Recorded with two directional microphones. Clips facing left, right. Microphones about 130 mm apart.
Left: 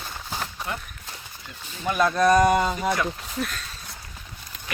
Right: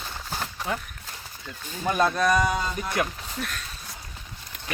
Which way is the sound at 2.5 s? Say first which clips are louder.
Left 7 dB; 70° left (ahead or behind).